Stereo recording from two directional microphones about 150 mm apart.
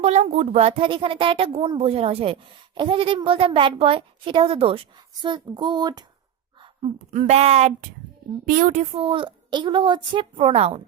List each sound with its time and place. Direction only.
0.0 s speech: 45° right (ahead or behind)
0.7 s speech: 35° right (ahead or behind)
7.1 s speech: 50° right (ahead or behind)
8.4 s a woman's voice: 60° right (ahead or behind)
8.8 s speech: 35° right (ahead or behind)